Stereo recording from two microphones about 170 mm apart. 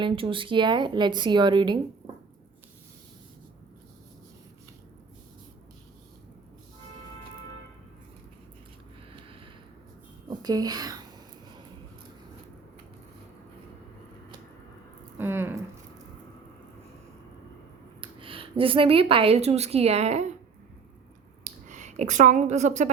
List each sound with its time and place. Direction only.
0.0 s speech: 30° right (ahead or behind)
10.2 s speech: 25° right (ahead or behind)
15.2 s speech: 15° right (ahead or behind)
18.0 s a woman's voice: 30° right (ahead or behind)
21.4 s speech: 45° right (ahead or behind)